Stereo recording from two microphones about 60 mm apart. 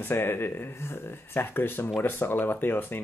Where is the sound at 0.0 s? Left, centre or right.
Left.